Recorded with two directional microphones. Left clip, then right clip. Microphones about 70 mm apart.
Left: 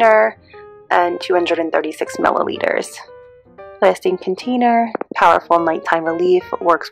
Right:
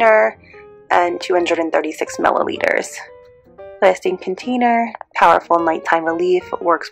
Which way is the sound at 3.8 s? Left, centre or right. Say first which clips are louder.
Even; left.